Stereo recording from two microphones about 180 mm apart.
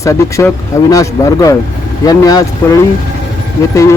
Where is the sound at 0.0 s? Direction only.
15° left (ahead or behind).